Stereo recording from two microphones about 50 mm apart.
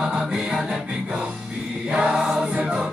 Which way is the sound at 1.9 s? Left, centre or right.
Centre.